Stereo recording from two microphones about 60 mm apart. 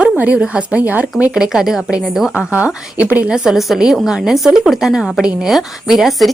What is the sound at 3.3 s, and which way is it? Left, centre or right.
A woman's voice, centre.